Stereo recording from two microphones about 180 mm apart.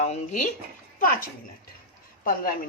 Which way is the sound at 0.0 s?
40° left (ahead or behind).